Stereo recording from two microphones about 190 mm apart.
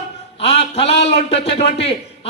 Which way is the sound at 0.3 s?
30° left (ahead or behind).